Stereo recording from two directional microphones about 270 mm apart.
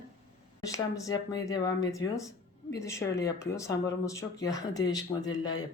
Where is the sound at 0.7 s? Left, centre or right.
Centre.